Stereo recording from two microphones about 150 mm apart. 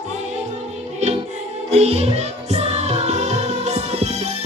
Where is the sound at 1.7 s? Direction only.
45° right (ahead or behind).